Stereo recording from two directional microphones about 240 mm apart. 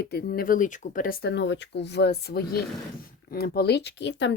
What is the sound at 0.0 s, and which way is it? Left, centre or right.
Speech, left.